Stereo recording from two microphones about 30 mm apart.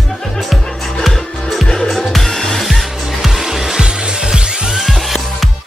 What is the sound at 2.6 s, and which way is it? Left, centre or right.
Music, centre.